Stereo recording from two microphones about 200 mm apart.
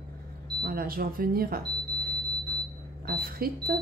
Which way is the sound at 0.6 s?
50° right (ahead or behind).